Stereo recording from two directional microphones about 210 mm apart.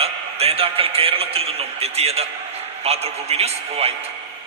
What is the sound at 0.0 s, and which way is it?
Speech, 30° right (ahead or behind).